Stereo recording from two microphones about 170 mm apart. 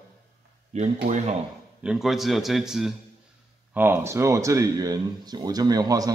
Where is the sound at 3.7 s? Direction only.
10° right (ahead or behind).